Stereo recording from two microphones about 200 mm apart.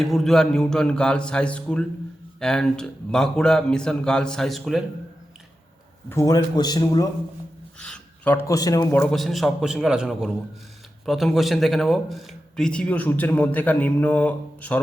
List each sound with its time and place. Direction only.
0.0 s a man's voice: centre (ahead or behind)
6.1 s a man's voice: 15° left (ahead or behind)
7.8 s a man's voice: 5° left (ahead or behind)